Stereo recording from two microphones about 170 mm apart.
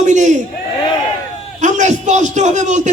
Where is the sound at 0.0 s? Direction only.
45° right (ahead or behind).